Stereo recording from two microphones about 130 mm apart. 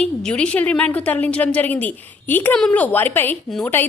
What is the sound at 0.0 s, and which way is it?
A woman's voice, 10° left (ahead or behind).